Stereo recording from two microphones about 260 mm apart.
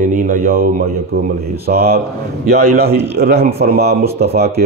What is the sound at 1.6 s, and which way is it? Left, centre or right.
Speech, right.